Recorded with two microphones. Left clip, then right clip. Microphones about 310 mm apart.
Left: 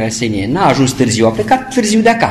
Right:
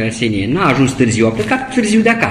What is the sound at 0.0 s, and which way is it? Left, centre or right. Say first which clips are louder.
Speech: even; left.